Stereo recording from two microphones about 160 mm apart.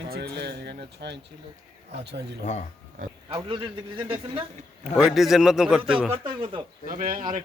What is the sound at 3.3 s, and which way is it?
A man's voice, 30° right (ahead or behind).